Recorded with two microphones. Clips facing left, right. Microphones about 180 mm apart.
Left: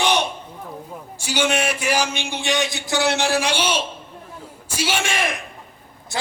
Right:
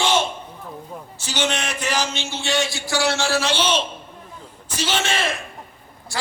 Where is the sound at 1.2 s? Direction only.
10° left (ahead or behind).